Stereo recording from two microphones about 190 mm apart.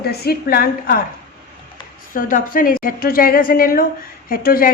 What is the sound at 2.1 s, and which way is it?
A woman's voice, 45° left (ahead or behind).